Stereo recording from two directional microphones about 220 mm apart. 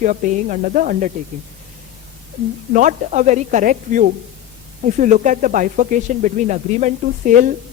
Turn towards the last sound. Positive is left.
turn(degrees=-35)  # may be behind; listen again after turning